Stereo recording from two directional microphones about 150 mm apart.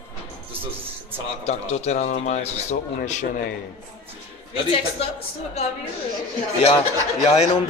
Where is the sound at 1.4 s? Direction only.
45° left (ahead or behind).